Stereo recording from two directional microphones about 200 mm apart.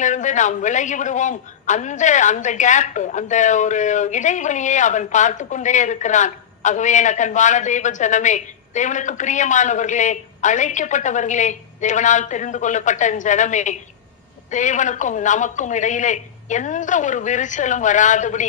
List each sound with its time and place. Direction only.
0.0 s a man's voice: 40° left (ahead or behind)